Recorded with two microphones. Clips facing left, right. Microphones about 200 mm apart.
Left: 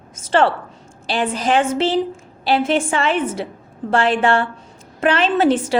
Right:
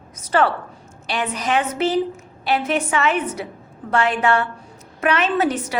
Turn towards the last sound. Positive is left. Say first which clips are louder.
# left 4 dB
turn(degrees=30)  # may be behind; listen again after turning